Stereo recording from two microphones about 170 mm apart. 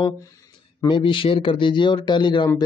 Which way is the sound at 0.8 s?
30° left (ahead or behind).